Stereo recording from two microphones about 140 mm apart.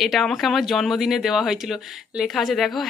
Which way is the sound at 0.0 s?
Centre (ahead or behind).